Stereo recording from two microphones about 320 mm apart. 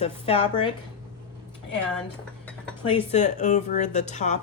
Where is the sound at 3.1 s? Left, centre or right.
Left.